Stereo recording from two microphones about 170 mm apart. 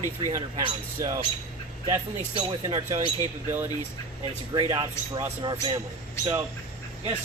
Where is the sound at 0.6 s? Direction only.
20° right (ahead or behind).